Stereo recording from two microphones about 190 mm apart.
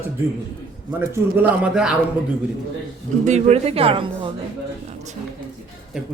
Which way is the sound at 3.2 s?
35° right (ahead or behind).